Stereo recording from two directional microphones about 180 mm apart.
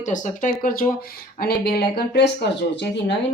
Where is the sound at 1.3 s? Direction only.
60° left (ahead or behind).